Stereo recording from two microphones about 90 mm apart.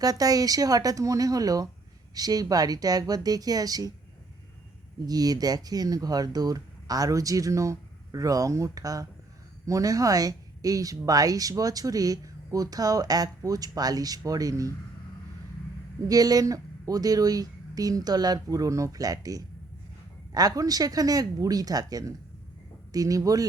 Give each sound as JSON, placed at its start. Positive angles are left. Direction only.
{"t": 0.0, "sound": "speech", "side_deg": -45}
{"t": 5.0, "sound": "speech", "side_deg": -45}
{"t": 16.0, "sound": "speech", "side_deg": -45}